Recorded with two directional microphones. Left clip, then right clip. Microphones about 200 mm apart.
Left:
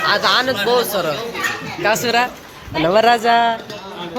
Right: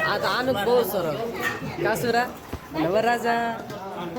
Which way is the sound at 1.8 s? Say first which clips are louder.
Left 7 dB; 10° left (ahead or behind).